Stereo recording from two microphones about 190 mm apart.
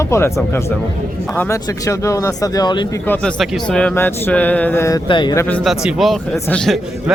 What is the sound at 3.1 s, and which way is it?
Speech, 5° left (ahead or behind).